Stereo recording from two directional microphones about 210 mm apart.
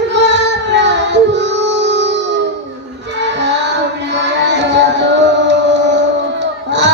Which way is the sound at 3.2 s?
55° right (ahead or behind).